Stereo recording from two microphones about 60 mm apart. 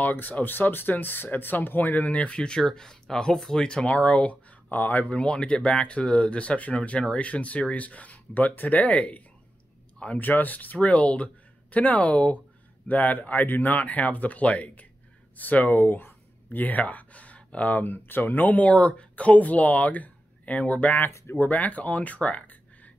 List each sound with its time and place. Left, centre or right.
0.0 s speech: left
21.1 s speech: left
21.4 s speech: left